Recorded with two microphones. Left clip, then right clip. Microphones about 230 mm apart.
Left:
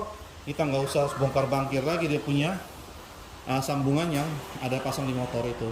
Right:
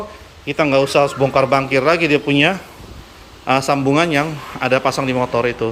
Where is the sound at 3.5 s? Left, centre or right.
Centre.